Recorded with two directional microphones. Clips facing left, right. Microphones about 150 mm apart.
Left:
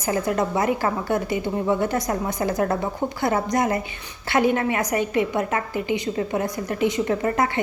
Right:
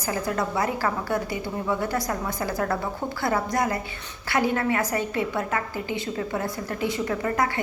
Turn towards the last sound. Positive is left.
turn(degrees=25)  # may be behind; listen again after turning